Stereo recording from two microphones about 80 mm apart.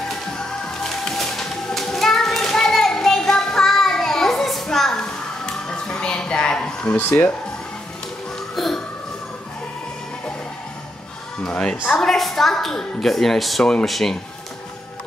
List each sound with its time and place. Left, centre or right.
0.8 s music: centre
7.0 s speech: left
8.5 s a sound: centre
11.4 s a woman's voice: centre